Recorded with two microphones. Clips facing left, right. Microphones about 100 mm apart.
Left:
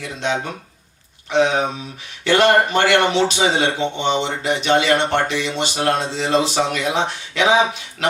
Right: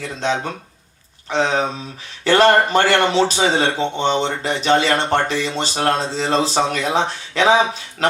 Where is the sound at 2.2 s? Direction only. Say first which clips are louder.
Right 1 dB; 40° right (ahead or behind).